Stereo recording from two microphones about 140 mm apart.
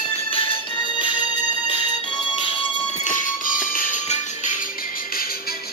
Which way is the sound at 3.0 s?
70° left (ahead or behind).